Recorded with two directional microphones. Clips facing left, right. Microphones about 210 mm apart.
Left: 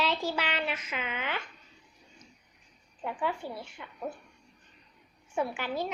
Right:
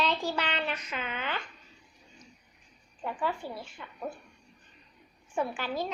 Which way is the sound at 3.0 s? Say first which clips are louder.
Even; 15° left (ahead or behind).